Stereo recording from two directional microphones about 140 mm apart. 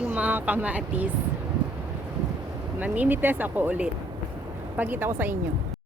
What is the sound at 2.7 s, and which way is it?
Speech, 10° right (ahead or behind).